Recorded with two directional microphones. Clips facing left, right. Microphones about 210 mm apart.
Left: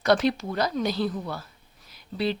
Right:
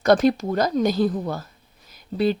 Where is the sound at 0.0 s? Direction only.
45° right (ahead or behind).